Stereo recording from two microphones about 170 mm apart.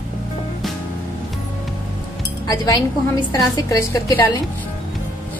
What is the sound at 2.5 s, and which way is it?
A woman's voice, 20° left (ahead or behind).